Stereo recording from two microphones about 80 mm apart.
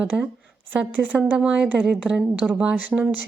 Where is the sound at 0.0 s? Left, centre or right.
Centre.